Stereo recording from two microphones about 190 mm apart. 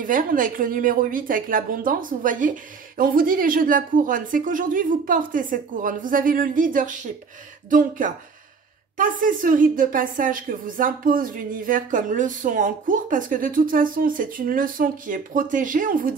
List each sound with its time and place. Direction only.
0.0 s a woman's voice: 45° right (ahead or behind)
8.9 s a woman's voice: 45° right (ahead or behind)